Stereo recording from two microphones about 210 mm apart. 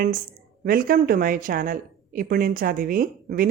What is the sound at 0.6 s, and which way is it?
A woman's voice, 45° right (ahead or behind).